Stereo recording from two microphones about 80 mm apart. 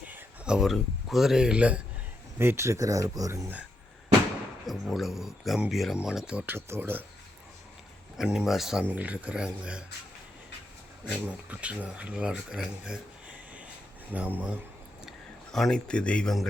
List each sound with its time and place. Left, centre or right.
0.4 s speech: centre
2.4 s speech: right
4.6 s speech: centre
6.4 s speech: right
8.2 s speech: centre
8.8 s speech: centre
11.0 s speech: centre
14.1 s speech: right
15.5 s speech: centre